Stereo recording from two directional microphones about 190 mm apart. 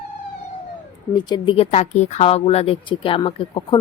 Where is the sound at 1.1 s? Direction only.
20° left (ahead or behind).